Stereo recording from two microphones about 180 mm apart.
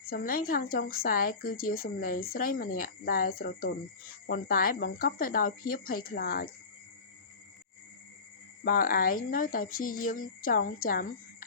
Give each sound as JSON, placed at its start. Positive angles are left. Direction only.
{"t": 0.1, "sound": "speech", "side_deg": 55}
{"t": 8.6, "sound": "speech", "side_deg": 50}